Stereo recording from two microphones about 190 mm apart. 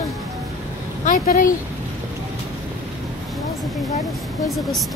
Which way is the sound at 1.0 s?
45° left (ahead or behind).